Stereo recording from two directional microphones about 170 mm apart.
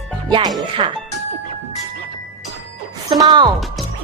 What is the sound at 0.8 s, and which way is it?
Speech, 35° right (ahead or behind).